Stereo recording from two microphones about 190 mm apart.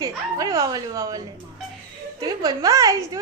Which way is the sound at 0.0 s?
15° right (ahead or behind).